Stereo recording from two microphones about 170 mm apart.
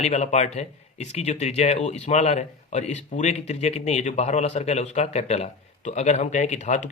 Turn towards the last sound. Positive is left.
turn(degrees=45)  # may be behind; listen again after turning